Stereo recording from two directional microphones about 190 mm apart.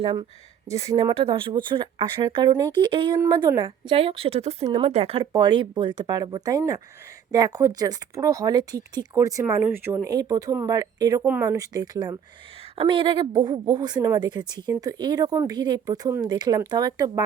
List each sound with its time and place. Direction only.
0.0 s speech: 30° right (ahead or behind)